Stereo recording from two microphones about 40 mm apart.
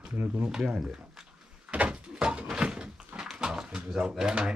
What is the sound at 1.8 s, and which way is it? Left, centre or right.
Door, right.